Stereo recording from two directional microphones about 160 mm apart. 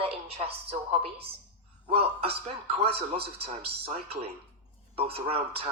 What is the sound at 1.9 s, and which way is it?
A man's voice, 35° right (ahead or behind).